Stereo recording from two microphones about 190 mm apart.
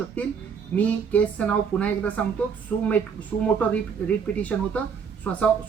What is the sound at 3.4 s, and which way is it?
Speech, 10° left (ahead or behind).